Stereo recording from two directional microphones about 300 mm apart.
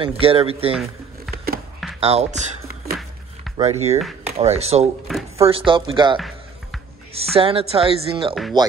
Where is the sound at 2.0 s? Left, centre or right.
Right.